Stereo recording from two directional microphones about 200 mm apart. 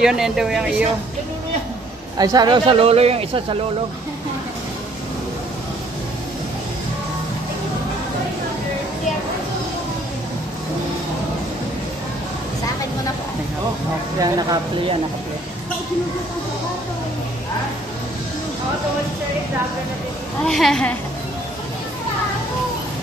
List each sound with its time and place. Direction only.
0.0 s speech: 5° right (ahead or behind)
2.1 s speech: 20° right (ahead or behind)
14.2 s speech: 20° right (ahead or behind)
20.4 s speech: centre (ahead or behind)